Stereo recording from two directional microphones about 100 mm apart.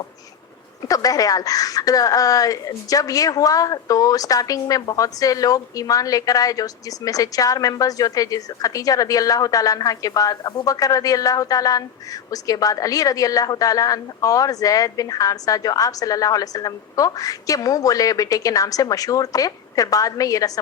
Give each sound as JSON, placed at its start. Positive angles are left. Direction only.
{"t": 0.9, "sound": "a woman's voice", "side_deg": 35}